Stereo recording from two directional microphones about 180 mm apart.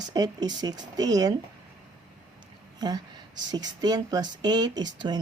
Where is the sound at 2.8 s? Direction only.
20° right (ahead or behind).